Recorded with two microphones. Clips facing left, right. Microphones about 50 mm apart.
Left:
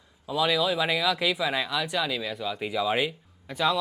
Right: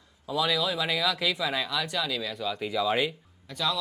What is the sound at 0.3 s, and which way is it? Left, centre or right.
Speech, centre.